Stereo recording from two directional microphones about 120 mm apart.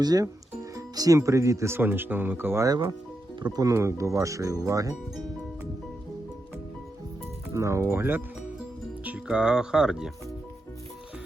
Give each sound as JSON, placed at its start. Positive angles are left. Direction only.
{"t": 0.0, "sound": "speech", "side_deg": -35}
{"t": 7.5, "sound": "speech", "side_deg": -25}